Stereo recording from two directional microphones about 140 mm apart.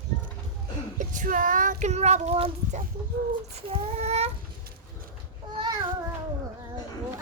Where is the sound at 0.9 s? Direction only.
65° right (ahead or behind); by 2.5 s 45° right (ahead or behind).